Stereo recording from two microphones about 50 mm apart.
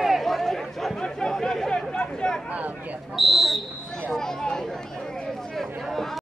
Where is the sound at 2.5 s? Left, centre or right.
Right.